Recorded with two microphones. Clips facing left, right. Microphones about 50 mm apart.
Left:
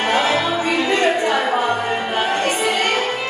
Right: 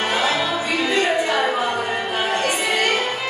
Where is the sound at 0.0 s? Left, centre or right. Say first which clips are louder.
Left 3 dB; left.